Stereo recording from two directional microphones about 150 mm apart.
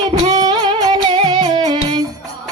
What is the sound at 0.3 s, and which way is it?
Music, 25° right (ahead or behind).